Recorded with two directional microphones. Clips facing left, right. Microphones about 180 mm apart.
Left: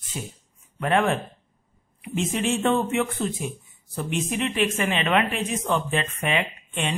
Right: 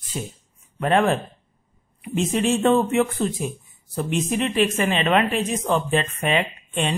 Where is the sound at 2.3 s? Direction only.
35° right (ahead or behind).